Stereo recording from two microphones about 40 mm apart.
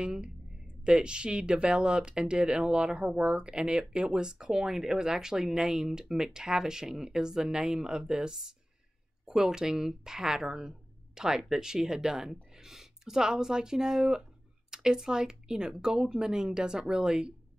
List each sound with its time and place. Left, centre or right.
0.0 s speech: right